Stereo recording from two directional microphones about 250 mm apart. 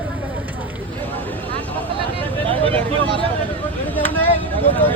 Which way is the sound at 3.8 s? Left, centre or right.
Centre.